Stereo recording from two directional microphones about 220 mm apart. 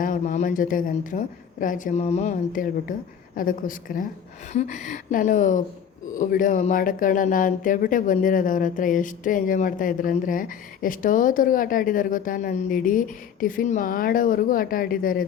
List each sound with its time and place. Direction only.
0.0 s speech: 35° left (ahead or behind)